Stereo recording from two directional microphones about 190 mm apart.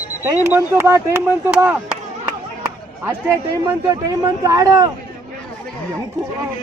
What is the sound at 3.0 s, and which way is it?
A man's voice, 15° right (ahead or behind).